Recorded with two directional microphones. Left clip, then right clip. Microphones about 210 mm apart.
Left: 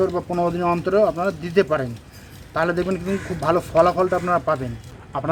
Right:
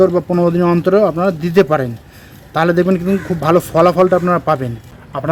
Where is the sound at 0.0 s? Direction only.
40° right (ahead or behind).